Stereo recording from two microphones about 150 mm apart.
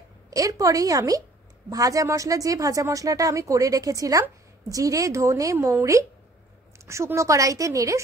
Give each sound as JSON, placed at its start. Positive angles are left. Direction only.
{"t": 0.3, "sound": "a woman's voice", "side_deg": -20}